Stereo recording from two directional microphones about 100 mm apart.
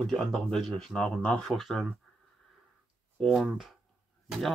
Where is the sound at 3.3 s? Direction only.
Centre (ahead or behind).